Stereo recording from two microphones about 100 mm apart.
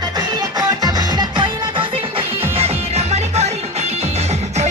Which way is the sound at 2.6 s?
90° right.